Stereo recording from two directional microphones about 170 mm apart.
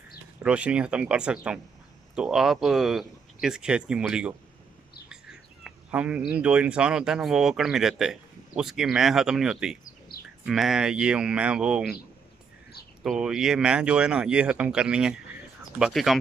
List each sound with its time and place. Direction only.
0.4 s speech: 5° right (ahead or behind)
9.8 s a sound: 60° left (ahead or behind)
10.4 s speech: centre (ahead or behind)
13.0 s speech: 5° right (ahead or behind)